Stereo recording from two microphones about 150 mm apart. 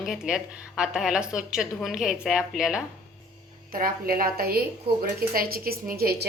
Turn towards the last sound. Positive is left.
turn(degrees=-90)